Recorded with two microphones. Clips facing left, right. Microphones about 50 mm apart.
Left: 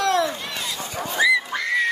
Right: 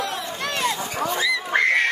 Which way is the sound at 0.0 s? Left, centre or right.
Left.